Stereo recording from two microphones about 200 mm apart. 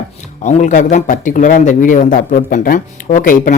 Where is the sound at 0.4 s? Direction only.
40° left (ahead or behind).